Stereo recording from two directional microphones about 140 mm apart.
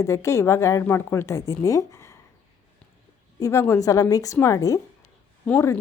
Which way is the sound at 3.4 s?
20° left (ahead or behind).